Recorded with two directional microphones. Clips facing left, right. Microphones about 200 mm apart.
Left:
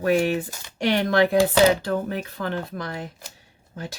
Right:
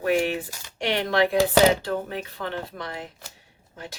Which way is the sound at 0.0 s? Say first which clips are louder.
Left 2 dB; 40° left (ahead or behind).